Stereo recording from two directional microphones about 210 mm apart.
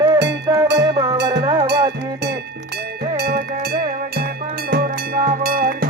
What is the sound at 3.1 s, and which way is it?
Music, 50° right (ahead or behind).